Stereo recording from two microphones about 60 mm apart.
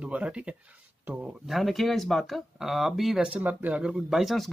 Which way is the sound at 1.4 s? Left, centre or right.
Centre.